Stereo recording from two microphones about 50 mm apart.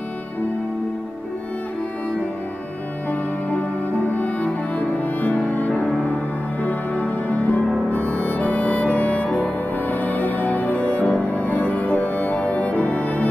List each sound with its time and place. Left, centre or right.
3.1 s music: left